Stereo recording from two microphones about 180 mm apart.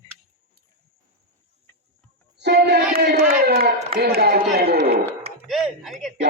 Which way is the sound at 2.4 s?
65° right (ahead or behind).